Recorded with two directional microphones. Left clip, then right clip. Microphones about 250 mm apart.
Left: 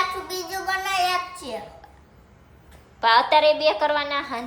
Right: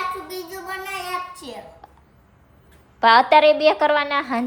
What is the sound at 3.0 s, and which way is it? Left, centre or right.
A woman's voice, right.